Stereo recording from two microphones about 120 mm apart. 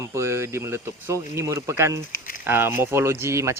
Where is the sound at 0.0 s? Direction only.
25° right (ahead or behind).